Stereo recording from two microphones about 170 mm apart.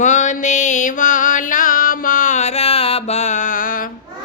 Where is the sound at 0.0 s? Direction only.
45° left (ahead or behind).